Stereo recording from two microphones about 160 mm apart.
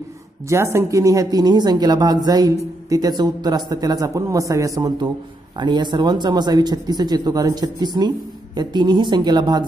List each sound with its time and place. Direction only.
0.5 s speech: 15° right (ahead or behind)